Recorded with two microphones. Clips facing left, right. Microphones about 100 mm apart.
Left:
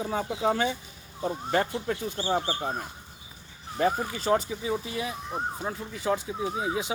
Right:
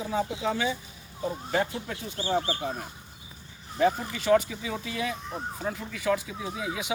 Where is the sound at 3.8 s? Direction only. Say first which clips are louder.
Right 1 dB; 35° left (ahead or behind).